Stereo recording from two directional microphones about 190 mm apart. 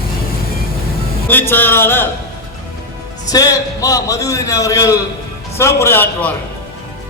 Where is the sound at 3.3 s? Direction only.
20° left (ahead or behind).